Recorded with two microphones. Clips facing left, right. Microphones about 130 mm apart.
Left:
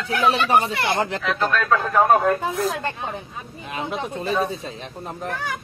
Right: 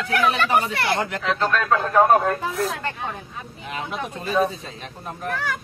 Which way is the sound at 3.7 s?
25° left (ahead or behind).